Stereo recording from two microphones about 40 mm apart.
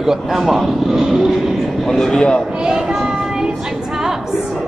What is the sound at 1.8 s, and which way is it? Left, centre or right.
Speech, centre.